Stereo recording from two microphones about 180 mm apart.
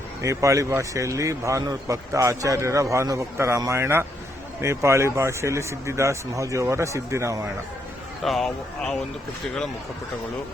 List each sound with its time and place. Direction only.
0.2 s a man's voice: 15° right (ahead or behind)
8.2 s speech: centre (ahead or behind)